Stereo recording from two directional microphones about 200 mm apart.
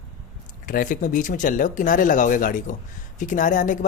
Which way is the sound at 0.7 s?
45° left (ahead or behind).